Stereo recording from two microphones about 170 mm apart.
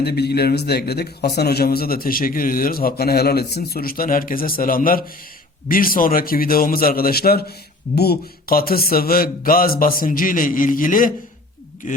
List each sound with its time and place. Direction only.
0.0 s a man's voice: 75° left (ahead or behind); by 12.0 s 50° left (ahead or behind)